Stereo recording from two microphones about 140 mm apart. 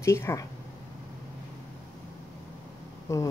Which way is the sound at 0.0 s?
20° left (ahead or behind).